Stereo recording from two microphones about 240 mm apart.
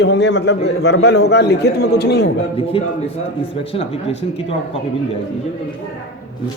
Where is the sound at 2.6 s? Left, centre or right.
Left.